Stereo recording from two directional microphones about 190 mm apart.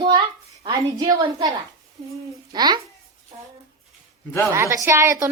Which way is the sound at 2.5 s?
20° right (ahead or behind).